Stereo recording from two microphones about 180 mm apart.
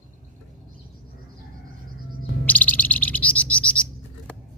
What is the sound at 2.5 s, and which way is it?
Bird, 10° left (ahead or behind).